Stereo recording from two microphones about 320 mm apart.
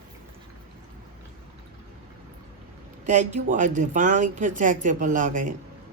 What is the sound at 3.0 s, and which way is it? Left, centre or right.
Speech, right.